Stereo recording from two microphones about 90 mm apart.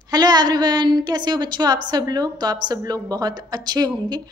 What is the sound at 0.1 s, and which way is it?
A woman's voice, 50° right (ahead or behind).